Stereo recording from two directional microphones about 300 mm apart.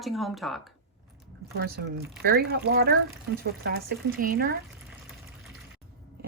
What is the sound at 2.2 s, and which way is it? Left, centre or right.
Speech, right.